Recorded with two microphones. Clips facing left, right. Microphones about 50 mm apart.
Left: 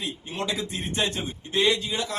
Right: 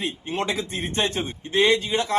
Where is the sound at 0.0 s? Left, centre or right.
Right.